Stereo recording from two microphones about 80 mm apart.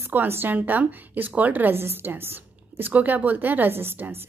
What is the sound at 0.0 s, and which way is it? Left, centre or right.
A woman's voice, right.